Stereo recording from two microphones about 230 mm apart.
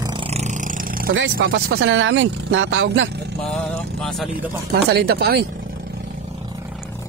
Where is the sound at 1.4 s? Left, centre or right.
Right.